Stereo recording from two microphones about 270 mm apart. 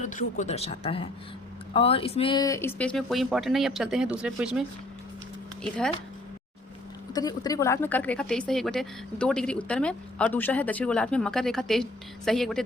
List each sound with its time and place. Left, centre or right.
0.0 s a woman's voice: left; by 4.6 s centre
7.1 s a woman's voice: centre